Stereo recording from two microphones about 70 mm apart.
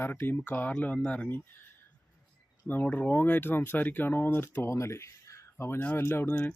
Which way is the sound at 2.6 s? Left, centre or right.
Left.